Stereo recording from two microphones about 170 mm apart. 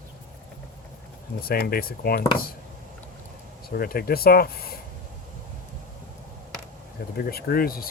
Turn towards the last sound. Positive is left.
turn(degrees=60)  # may be behind; listen again after turning